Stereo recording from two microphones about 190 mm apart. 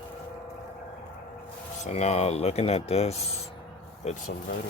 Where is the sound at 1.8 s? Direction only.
35° left (ahead or behind).